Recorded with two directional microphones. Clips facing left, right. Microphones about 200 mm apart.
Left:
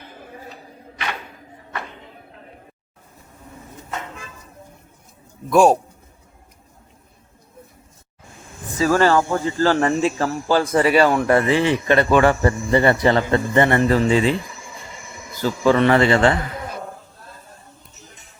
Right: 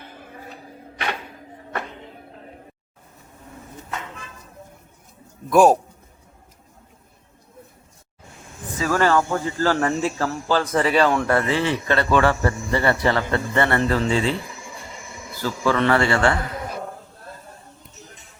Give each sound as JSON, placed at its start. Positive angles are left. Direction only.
{"t": 5.5, "sound": "a man's voice", "side_deg": -5}
{"t": 8.8, "sound": "a man's voice", "side_deg": 30}
{"t": 15.4, "sound": "a man's voice", "side_deg": 20}